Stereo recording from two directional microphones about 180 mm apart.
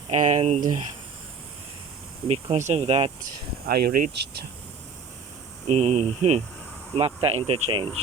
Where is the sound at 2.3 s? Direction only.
40° right (ahead or behind).